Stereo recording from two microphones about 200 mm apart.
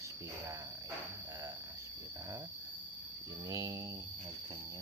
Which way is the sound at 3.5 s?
15° right (ahead or behind).